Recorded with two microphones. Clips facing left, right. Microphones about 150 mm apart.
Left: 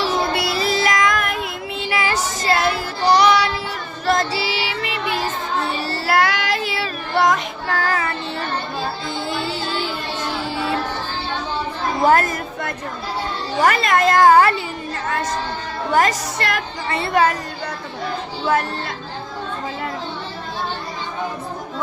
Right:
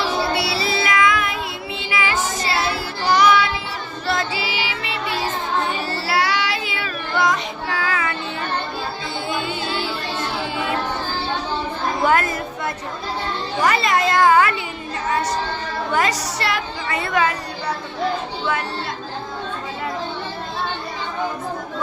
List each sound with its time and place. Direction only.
0.3 s music: 50° left (ahead or behind)
1.9 s child singing: 40° left (ahead or behind)
3.1 s child singing: 35° left (ahead or behind)
9.4 s music: 35° left (ahead or behind)
12.0 s chatter: 40° left (ahead or behind)
13.6 s a sound: 50° left (ahead or behind)
16.0 s a woman's voice: 50° left (ahead or behind)
16.9 s a woman's voice: 30° left (ahead or behind)